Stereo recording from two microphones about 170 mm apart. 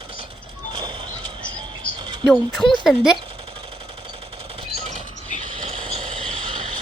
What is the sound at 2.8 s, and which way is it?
Speech, centre (ahead or behind).